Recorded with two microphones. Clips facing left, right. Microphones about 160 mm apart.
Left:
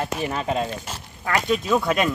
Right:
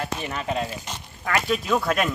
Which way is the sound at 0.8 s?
5° left (ahead or behind).